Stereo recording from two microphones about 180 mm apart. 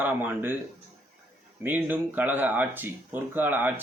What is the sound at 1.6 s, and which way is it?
Speech, 10° right (ahead or behind).